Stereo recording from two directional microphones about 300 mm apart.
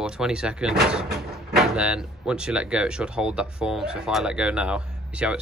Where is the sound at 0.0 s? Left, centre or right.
Centre.